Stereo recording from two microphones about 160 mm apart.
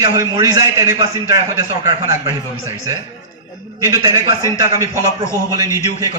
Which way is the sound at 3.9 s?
25° right (ahead or behind).